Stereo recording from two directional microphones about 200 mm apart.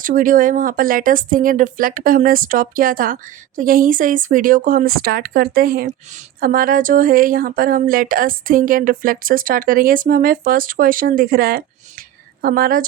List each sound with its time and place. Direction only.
0.0 s speech: 40° right (ahead or behind)